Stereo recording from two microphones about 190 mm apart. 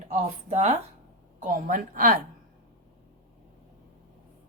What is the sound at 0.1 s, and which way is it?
A woman's voice, 35° right (ahead or behind).